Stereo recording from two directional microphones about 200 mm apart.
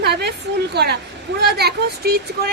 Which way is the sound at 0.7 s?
55° right (ahead or behind).